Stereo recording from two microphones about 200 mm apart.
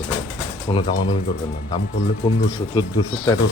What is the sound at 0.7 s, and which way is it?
Speech, 20° left (ahead or behind).